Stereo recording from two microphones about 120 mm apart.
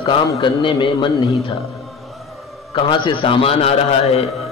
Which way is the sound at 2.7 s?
40° left (ahead or behind).